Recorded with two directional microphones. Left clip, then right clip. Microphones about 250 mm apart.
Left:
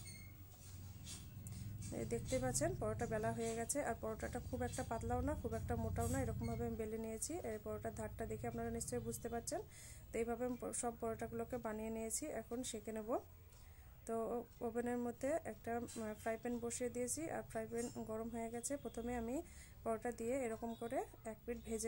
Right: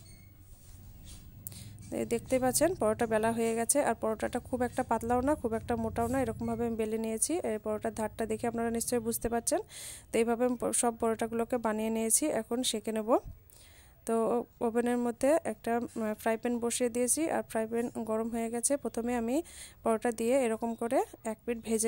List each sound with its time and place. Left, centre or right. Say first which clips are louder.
1.6 s speech: right 12 dB; right